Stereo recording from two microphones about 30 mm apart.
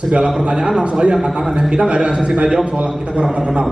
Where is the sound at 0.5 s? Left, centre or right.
Right.